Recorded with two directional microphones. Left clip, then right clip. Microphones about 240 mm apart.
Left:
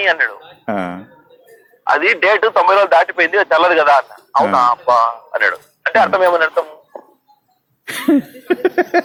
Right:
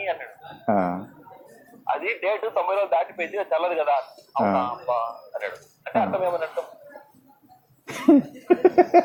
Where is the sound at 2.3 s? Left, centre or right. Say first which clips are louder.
Left 11 dB; left.